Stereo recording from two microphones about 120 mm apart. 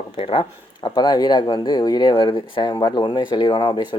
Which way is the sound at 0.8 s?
35° left (ahead or behind).